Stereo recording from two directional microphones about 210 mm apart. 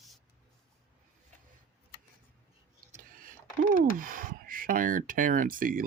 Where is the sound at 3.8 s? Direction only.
40° right (ahead or behind).